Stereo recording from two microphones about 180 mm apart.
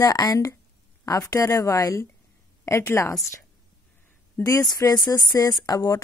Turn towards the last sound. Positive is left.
turn(degrees=20)  # may be behind; listen again after turning